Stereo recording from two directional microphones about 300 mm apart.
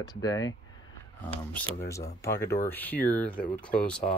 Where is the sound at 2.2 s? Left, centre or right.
Centre.